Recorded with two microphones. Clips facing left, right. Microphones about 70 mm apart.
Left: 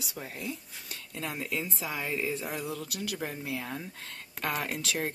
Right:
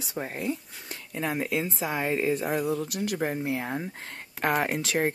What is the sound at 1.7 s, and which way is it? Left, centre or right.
Speech, right.